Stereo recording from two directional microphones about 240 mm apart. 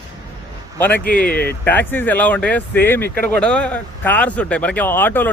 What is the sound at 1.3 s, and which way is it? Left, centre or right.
Speech, left.